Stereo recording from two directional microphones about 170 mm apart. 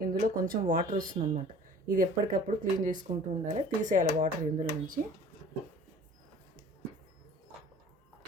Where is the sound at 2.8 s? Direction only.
50° right (ahead or behind).